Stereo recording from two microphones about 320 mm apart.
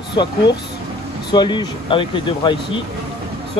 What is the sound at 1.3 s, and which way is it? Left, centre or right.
Speech, centre.